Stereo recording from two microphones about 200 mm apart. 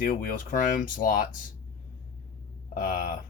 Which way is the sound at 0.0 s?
45° left (ahead or behind).